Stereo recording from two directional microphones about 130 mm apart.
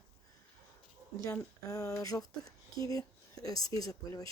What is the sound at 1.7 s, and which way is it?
Speech, 25° left (ahead or behind).